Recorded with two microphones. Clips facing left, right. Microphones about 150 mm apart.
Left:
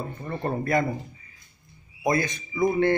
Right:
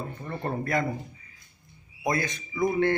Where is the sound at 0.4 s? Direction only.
10° left (ahead or behind).